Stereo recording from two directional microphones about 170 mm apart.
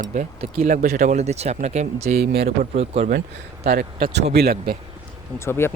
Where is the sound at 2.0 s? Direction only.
65° right (ahead or behind).